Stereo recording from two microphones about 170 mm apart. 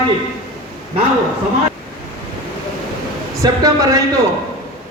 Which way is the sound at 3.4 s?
20° right (ahead or behind).